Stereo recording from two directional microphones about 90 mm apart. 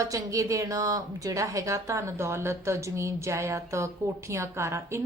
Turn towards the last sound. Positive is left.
turn(degrees=-30)  # may be behind; listen again after turning